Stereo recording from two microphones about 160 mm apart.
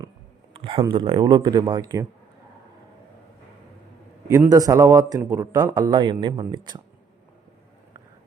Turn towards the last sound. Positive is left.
turn(degrees=-30)  # may be behind; listen again after turning